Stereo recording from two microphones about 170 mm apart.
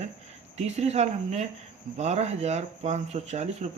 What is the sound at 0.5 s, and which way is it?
Speech, 40° right (ahead or behind).